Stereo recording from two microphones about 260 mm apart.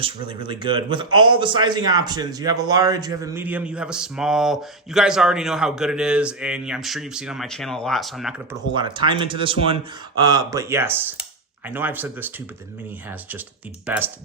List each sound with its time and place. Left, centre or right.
0.0 s a man's voice: centre
8.7 s speech: centre
13.8 s a man's voice: centre